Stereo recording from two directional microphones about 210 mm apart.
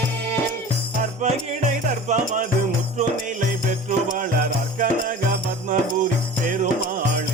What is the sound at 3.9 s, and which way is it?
Music, 40° right (ahead or behind).